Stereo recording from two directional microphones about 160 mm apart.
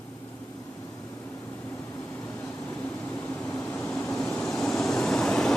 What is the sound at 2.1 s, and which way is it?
Vehicle, 10° left (ahead or behind).